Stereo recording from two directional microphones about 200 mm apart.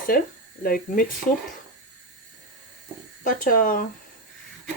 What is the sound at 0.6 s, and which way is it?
Speech, 45° left (ahead or behind).